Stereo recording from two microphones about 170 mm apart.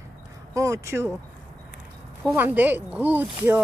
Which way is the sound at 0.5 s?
15° right (ahead or behind).